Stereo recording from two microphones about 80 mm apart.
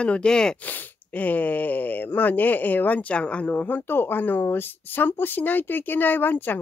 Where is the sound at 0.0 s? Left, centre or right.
Centre.